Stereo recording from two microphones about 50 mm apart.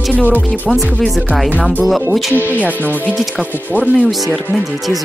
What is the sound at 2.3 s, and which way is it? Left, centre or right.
Speech, right.